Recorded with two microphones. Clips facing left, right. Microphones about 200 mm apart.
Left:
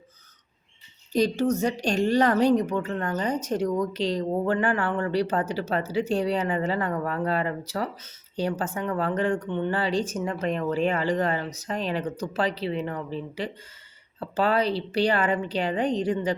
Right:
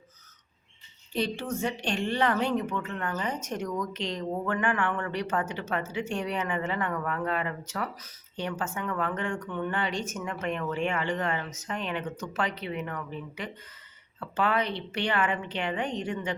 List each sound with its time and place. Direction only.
1.1 s speech: 40° left (ahead or behind)